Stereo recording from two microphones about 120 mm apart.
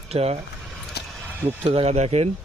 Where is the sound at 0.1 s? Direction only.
60° right (ahead or behind).